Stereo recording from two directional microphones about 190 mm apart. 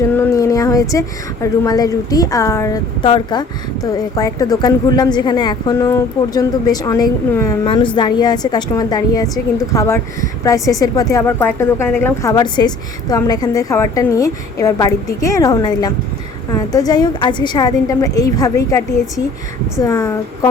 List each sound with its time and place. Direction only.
0.1 s a woman's voice: 15° left (ahead or behind)